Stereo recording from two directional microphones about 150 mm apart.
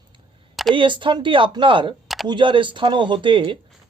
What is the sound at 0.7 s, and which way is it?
A man's voice, 35° right (ahead or behind).